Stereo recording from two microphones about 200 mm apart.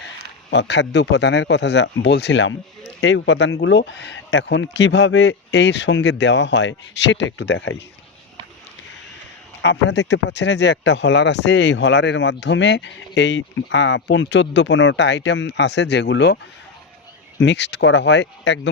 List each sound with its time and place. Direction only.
0.5 s speech: 60° left (ahead or behind)
9.6 s speech: 60° left (ahead or behind)
17.4 s speech: 60° left (ahead or behind)